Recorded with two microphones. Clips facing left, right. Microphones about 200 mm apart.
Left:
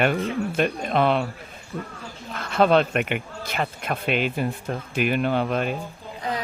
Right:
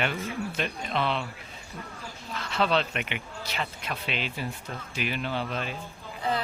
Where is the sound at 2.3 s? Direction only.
50° left (ahead or behind).